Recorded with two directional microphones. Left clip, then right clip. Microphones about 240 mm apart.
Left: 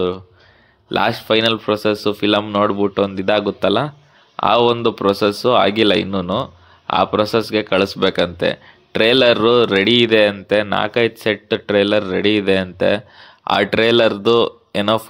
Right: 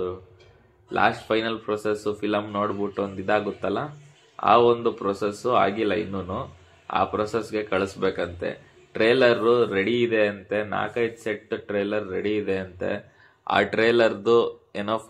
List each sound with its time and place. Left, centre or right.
0.9 s speech: left